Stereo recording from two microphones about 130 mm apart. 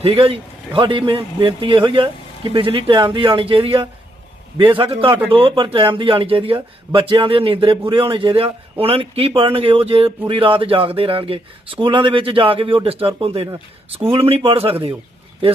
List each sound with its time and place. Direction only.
0.0 s speech: 45° right (ahead or behind)